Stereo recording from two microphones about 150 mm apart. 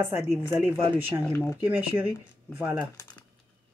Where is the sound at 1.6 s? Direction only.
10° right (ahead or behind).